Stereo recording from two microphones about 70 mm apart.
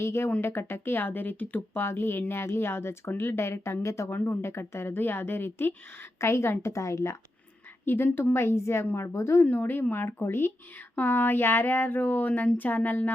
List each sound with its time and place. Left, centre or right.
0.0 s speech: left
4.1 s speech: left
7.9 s speech: left
9.4 s speech: left